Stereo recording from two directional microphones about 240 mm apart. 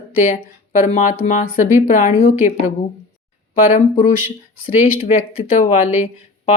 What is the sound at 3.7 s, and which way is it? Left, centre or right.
Speech, left.